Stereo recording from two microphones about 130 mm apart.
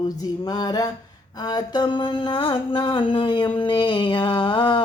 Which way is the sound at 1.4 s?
30° left (ahead or behind).